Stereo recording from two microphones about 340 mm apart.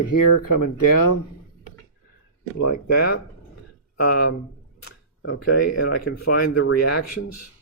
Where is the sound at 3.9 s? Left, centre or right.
Left.